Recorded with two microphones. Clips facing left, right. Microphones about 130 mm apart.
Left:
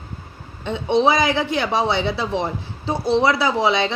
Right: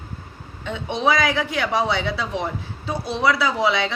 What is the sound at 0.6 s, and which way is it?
Speech, 30° left (ahead or behind).